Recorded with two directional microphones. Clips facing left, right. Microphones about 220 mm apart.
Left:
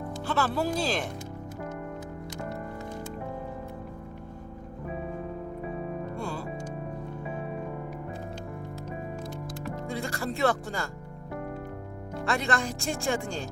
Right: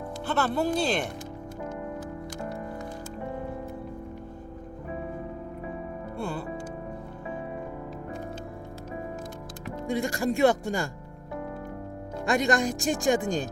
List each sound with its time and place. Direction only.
0.3 s speech: centre (ahead or behind)
9.8 s speech: 15° right (ahead or behind)
12.2 s speech: 15° right (ahead or behind)